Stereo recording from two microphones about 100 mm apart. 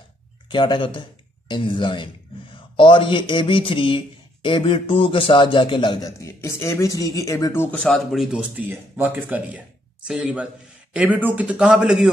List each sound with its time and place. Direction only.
0.5 s a man's voice: 55° left (ahead or behind)
6.0 s speech: 30° left (ahead or behind)
7.7 s a man's voice: 5° left (ahead or behind)